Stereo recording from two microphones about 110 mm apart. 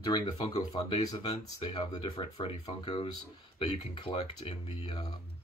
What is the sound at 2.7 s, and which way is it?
Speech, 50° left (ahead or behind).